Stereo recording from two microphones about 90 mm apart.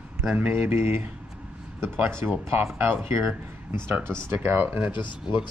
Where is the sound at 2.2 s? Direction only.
25° right (ahead or behind).